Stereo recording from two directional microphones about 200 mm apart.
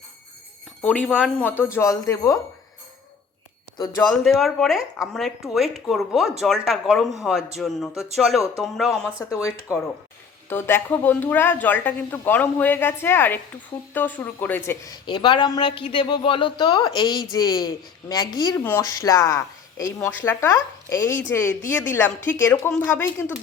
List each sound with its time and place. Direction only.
0.8 s speech: 5° left (ahead or behind)
4.0 s speech: centre (ahead or behind)
9.1 s speech: 15° left (ahead or behind)
10.5 s speech: 10° left (ahead or behind)
15.0 s speech: 20° left (ahead or behind)